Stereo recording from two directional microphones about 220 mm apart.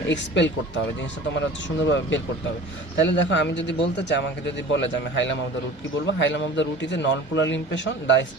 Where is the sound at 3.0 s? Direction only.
55° left (ahead or behind).